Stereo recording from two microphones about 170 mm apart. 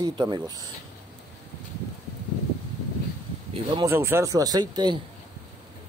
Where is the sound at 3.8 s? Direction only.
15° right (ahead or behind).